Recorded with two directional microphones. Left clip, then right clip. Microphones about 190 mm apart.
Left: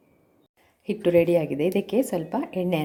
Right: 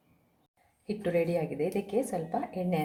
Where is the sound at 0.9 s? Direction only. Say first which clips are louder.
Left 9 dB; 50° left (ahead or behind).